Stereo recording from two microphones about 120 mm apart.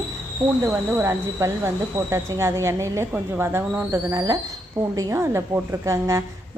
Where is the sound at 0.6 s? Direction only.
20° right (ahead or behind).